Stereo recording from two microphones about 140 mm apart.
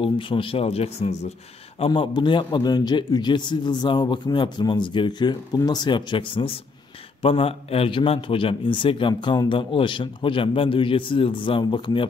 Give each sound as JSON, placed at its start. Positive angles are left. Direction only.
{"t": 0.0, "sound": "speech", "side_deg": 40}
{"t": 1.8, "sound": "a man's voice", "side_deg": 35}